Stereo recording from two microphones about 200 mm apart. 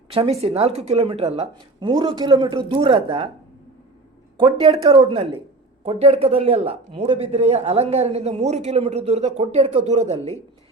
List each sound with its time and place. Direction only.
0.1 s a woman's voice: 30° right (ahead or behind)
4.4 s a woman's voice: 25° right (ahead or behind)